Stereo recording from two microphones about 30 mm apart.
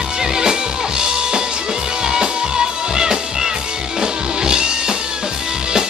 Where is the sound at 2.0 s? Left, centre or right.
Right.